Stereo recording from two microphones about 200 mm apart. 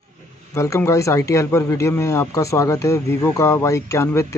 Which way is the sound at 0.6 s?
15° left (ahead or behind).